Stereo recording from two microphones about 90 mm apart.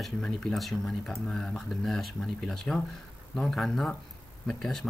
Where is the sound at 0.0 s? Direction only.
5° left (ahead or behind).